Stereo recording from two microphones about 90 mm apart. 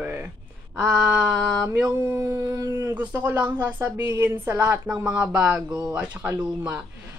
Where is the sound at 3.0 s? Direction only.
20° right (ahead or behind).